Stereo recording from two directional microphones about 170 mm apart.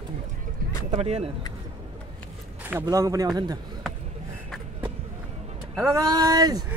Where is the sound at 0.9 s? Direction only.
40° right (ahead or behind).